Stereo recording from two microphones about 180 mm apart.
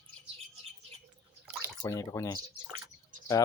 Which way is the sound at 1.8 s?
15° left (ahead or behind).